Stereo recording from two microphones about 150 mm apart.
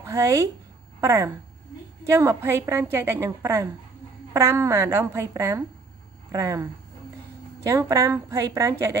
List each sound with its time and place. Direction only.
0.0 s a woman's voice: 20° right (ahead or behind)